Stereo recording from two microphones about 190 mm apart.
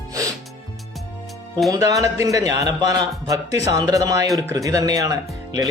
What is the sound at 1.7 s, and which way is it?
Speech, 20° right (ahead or behind).